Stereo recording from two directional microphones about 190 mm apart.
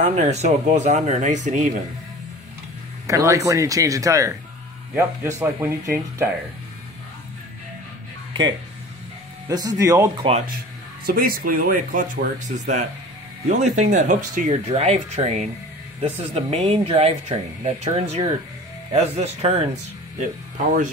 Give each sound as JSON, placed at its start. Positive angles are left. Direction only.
{"t": 0.1, "sound": "speech", "side_deg": -35}
{"t": 3.1, "sound": "speech", "side_deg": -15}
{"t": 5.4, "sound": "speech", "side_deg": -15}
{"t": 8.3, "sound": "music", "side_deg": -25}
{"t": 9.5, "sound": "speech", "side_deg": -20}
{"t": 11.1, "sound": "speech", "side_deg": -50}